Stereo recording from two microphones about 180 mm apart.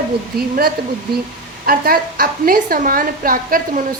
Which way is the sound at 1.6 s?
55° right (ahead or behind).